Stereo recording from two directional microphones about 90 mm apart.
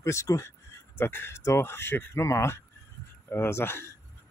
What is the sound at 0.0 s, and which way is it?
Speech, 35° left (ahead or behind).